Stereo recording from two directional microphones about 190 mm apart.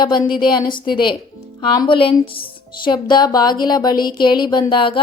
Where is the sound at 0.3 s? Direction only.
25° left (ahead or behind).